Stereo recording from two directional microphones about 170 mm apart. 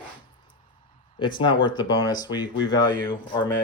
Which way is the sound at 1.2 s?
25° left (ahead or behind).